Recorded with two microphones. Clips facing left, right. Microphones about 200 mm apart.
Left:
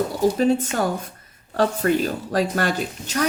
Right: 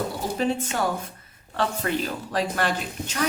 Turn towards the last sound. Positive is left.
turn(degrees=45)  # may be behind; listen again after turning